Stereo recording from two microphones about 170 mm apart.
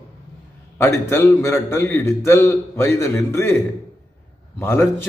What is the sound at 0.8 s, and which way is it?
A man's voice, 15° left (ahead or behind).